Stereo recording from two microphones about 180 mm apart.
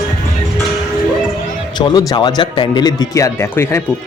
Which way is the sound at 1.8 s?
25° left (ahead or behind).